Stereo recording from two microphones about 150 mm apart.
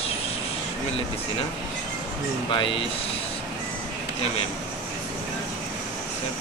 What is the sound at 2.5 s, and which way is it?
Speech, 35° left (ahead or behind).